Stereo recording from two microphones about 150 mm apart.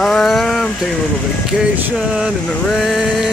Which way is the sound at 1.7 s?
10° right (ahead or behind).